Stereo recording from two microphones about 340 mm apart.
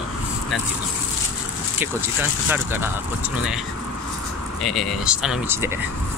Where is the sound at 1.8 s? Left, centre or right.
Centre.